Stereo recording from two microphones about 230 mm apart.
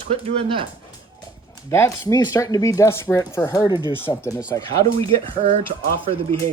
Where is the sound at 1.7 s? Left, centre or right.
Centre.